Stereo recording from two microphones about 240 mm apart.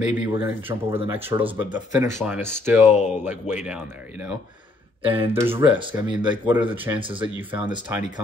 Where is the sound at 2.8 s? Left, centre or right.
Left.